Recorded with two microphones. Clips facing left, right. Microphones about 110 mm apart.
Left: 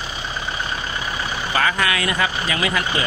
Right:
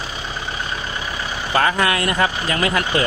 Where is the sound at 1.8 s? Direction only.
45° right (ahead or behind).